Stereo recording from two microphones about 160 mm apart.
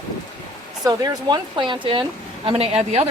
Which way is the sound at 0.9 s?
25° right (ahead or behind).